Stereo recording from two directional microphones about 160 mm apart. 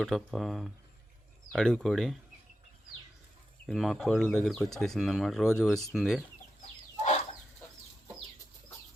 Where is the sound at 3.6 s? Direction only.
Centre (ahead or behind).